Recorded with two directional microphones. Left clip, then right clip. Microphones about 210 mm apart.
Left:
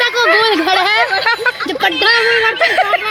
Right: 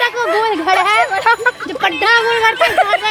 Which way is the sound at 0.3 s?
40° left (ahead or behind).